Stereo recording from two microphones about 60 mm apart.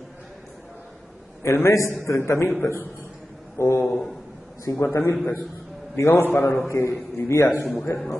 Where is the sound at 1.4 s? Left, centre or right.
Left.